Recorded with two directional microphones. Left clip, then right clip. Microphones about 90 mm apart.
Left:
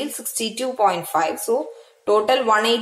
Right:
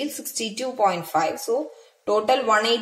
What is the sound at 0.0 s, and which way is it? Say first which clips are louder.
A woman's voice: left 2 dB; 25° right (ahead or behind).